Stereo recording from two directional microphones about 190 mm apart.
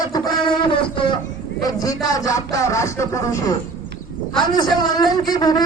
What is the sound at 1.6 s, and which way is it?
Music, 20° left (ahead or behind).